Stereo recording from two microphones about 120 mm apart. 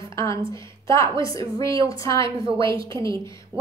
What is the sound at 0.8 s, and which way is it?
Speech, 25° left (ahead or behind).